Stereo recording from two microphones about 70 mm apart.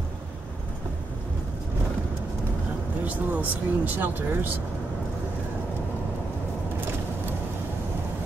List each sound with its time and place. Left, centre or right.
3.1 s speech: right